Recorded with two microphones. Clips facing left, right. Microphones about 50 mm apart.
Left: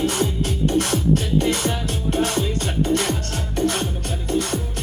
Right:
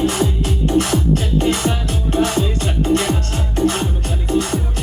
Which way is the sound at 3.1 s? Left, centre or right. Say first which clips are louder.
Right 4 dB; right.